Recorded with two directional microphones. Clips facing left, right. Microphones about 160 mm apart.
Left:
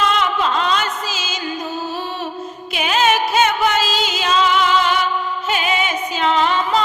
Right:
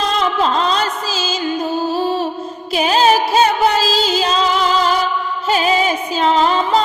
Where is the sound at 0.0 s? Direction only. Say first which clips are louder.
Right 2 dB; 35° right (ahead or behind).